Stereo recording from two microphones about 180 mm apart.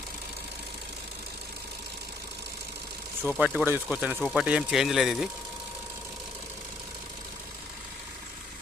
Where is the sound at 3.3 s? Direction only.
5° right (ahead or behind).